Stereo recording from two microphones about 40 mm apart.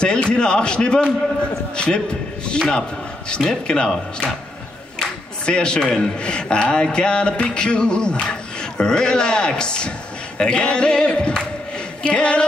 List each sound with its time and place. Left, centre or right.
0.0 s a man's voice: left
5.4 s a man's voice: left